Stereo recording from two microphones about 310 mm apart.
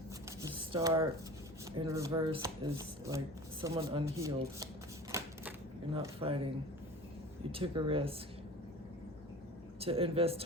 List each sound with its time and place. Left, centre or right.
0.3 s shuffling cards: centre
1.7 s speech: centre
5.1 s typewriter: centre
7.5 s speech: centre
9.8 s speech: centre